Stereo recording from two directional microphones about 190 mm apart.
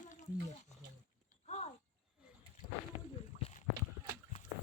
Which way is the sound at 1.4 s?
35° left (ahead or behind).